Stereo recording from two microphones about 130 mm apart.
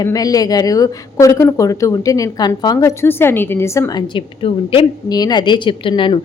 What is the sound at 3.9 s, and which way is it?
A woman's voice, 35° left (ahead or behind).